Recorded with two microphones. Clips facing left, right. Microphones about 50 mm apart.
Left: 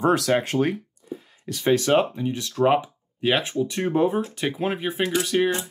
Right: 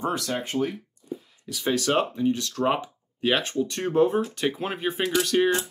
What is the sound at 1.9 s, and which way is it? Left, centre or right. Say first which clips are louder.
Speech: left 2 dB; centre.